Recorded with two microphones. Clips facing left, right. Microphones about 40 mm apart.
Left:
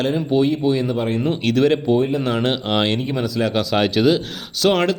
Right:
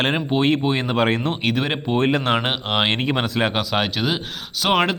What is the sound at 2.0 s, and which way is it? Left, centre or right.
Speech, right.